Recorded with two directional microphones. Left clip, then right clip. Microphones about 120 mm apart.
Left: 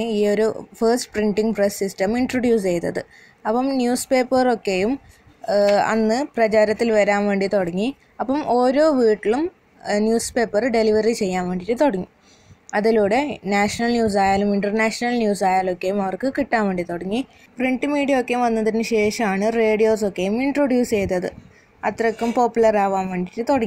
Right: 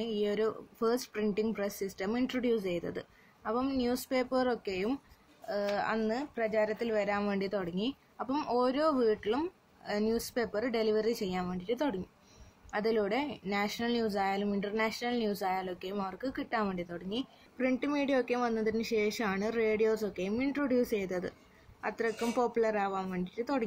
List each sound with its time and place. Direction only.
0.0 s speech: 50° left (ahead or behind)
17.6 s speech: 35° left (ahead or behind)